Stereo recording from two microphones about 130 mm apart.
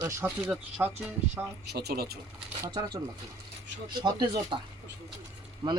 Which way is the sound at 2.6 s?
30° right (ahead or behind).